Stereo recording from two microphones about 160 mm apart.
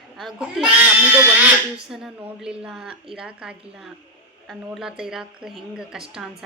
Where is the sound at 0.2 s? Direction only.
Centre (ahead or behind).